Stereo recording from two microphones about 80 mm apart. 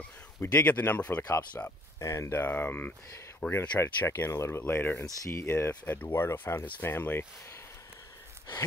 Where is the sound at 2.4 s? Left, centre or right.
Left.